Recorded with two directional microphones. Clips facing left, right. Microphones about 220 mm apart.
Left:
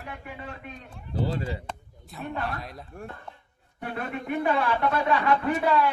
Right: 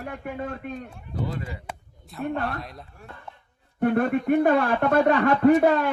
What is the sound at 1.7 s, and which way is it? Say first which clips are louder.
Speech: even; centre (ahead or behind).